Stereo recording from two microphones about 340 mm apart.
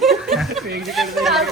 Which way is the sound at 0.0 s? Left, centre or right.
Centre.